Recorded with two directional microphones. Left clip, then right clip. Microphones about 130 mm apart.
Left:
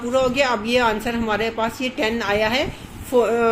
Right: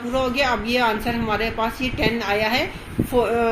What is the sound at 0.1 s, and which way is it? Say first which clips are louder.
A woman's voice: left 2 dB; 55° left (ahead or behind).